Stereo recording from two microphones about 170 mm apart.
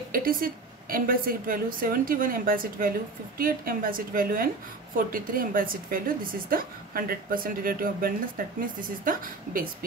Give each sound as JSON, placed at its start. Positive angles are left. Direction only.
{"t": 0.1, "sound": "a woman's voice", "side_deg": -55}